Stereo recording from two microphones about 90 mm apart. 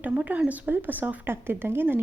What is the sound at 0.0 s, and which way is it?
A woman's voice, 15° right (ahead or behind).